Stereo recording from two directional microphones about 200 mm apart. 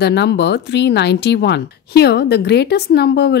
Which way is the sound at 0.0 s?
60° left (ahead or behind).